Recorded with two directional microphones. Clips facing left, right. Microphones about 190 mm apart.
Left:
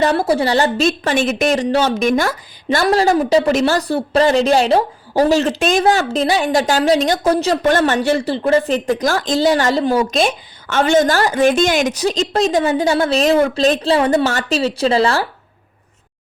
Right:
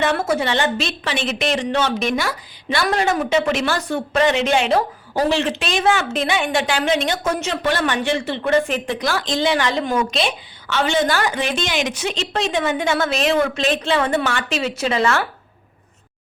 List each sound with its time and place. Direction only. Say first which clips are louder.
0.0 s a woman's voice: left 4 dB; 35° left (ahead or behind)
2.8 s a woman's voice: left 6 dB; 35° left (ahead or behind)